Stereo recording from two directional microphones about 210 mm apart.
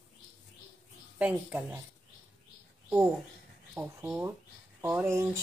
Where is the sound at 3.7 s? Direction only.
10° right (ahead or behind).